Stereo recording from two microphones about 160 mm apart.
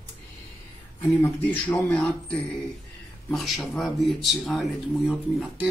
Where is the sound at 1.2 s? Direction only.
15° left (ahead or behind).